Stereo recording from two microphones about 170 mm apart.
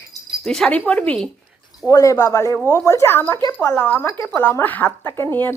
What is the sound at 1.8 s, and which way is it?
Speech, 20° left (ahead or behind).